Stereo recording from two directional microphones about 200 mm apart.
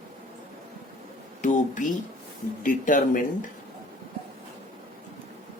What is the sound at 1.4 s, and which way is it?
A man's voice, 40° left (ahead or behind).